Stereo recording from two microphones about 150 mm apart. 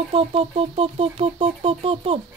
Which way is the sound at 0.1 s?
40° right (ahead or behind).